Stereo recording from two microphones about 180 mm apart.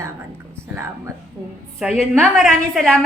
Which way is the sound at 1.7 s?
Centre (ahead or behind).